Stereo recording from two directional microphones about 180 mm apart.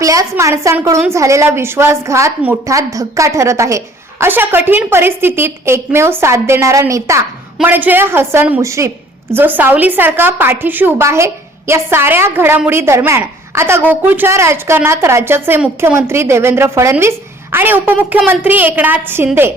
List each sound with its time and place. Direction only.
0.0 s a woman's voice: 20° right (ahead or behind)